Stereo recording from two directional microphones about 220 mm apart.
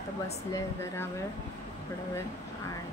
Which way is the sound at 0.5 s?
10° left (ahead or behind).